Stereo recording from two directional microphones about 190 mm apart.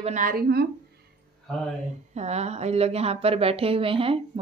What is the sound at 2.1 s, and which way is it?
A woman's voice, 35° right (ahead or behind).